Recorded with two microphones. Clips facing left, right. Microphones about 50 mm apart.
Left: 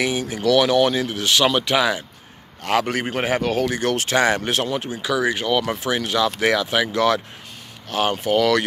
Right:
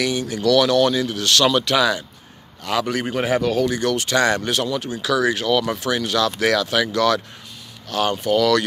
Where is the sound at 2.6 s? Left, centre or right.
Left.